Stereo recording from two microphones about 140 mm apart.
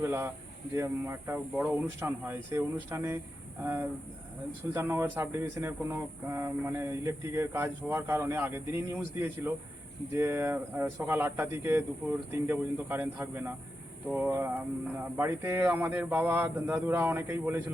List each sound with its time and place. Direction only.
0.0 s speech: 15° right (ahead or behind)